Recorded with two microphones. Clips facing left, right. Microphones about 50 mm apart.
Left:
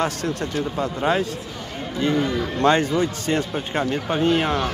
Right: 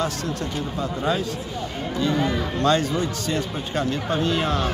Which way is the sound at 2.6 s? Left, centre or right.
Left.